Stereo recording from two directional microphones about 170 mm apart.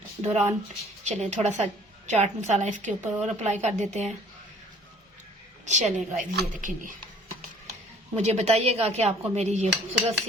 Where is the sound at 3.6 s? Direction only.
40° right (ahead or behind).